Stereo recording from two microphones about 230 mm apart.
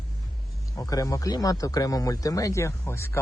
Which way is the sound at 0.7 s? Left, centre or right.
Centre.